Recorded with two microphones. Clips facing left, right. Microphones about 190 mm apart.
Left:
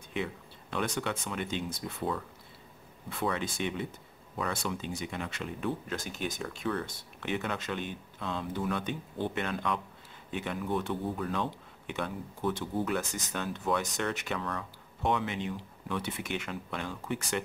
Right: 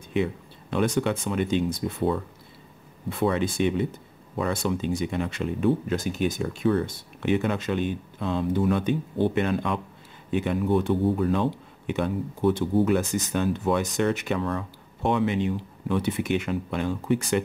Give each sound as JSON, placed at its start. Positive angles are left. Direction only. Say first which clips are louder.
{"t": 0.1, "sound": "speech", "louder": "right 9 dB", "side_deg": -20}
{"t": 5.9, "sound": "speech", "louder": "right 10 dB", "side_deg": -10}
{"t": 6.4, "sound": "speech", "louder": "right 10 dB", "side_deg": -25}